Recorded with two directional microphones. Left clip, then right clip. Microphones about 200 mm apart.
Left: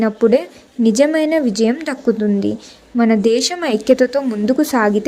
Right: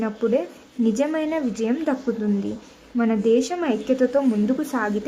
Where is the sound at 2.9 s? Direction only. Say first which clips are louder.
Left 5 dB; 25° left (ahead or behind).